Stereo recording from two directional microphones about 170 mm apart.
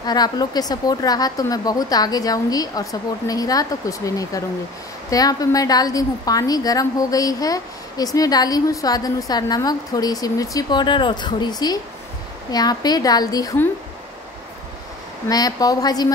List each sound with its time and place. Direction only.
0.0 s a woman's voice: 25° left (ahead or behind)
15.2 s a woman's voice: 20° left (ahead or behind)